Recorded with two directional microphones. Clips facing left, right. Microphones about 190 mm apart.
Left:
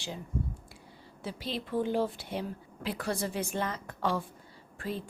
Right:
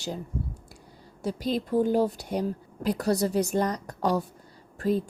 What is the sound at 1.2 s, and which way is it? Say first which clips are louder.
A woman's voice: right 8 dB; 45° right (ahead or behind).